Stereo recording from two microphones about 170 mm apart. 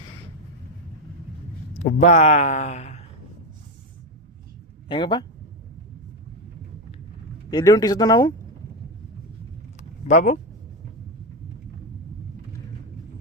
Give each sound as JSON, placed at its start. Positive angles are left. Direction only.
{"t": 1.8, "sound": "speech", "side_deg": 40}
{"t": 4.9, "sound": "speech", "side_deg": 30}
{"t": 7.5, "sound": "speech", "side_deg": 20}
{"t": 10.1, "sound": "speech", "side_deg": 40}